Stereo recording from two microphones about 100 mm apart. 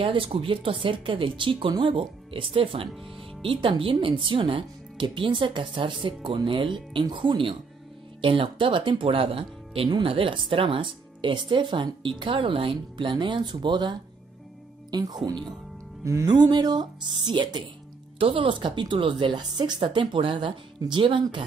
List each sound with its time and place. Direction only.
0.0 s speech: 65° right (ahead or behind); by 15.3 s 40° right (ahead or behind)
16.0 s music: 30° right (ahead or behind)
16.3 s speech: 45° right (ahead or behind)